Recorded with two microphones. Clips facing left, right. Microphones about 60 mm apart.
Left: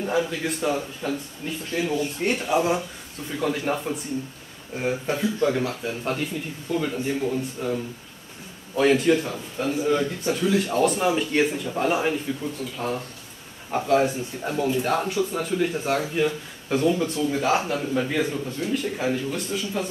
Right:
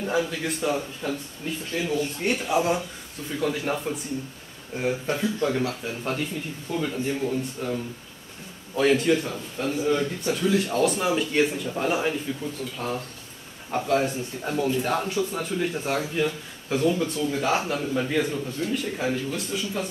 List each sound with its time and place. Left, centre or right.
0.0 s a man's voice: centre